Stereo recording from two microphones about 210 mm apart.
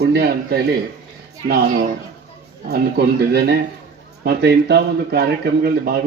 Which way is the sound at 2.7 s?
50° right (ahead or behind).